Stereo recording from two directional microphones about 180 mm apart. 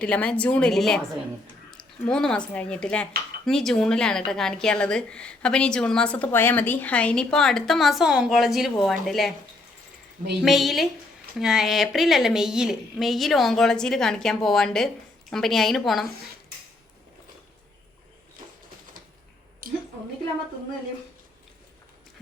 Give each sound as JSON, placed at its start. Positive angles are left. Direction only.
{"t": 0.0, "sound": "a woman's voice", "side_deg": 5}
{"t": 10.4, "sound": "a woman's voice", "side_deg": 0}
{"t": 19.6, "sound": "a sound", "side_deg": -50}